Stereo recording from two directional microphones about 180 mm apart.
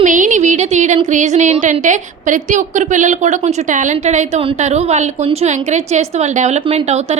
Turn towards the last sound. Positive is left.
turn(degrees=-40)  # may be behind; listen again after turning